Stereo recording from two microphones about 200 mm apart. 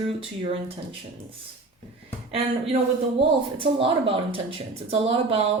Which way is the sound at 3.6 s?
25° right (ahead or behind).